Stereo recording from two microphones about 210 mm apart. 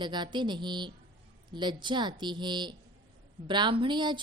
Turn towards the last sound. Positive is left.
turn(degrees=-20)  # may be behind; listen again after turning